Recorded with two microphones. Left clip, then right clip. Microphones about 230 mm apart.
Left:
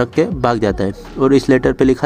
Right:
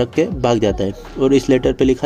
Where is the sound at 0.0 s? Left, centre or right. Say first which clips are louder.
Left 2 dB; centre.